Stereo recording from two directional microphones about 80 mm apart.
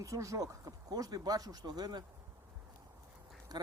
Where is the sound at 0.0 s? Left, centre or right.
Right.